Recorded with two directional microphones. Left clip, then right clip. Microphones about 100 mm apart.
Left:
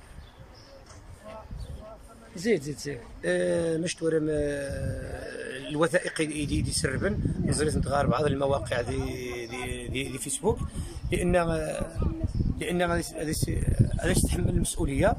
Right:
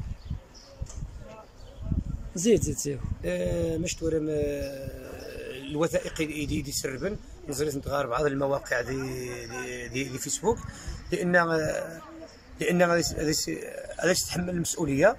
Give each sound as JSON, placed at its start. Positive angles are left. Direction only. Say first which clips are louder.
{"t": 2.3, "sound": "speech", "louder": "right 3 dB", "side_deg": -30}
{"t": 3.2, "sound": "speech", "louder": "left 4 dB", "side_deg": -5}
{"t": 10.4, "sound": "speech", "louder": "even", "side_deg": 15}
{"t": 12.5, "sound": "speech", "louder": "right 5 dB", "side_deg": -10}